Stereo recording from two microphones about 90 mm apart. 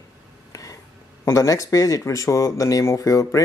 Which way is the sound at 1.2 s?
35° left (ahead or behind).